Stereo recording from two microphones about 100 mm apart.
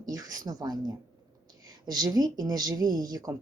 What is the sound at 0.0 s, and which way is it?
Speech, 40° right (ahead or behind).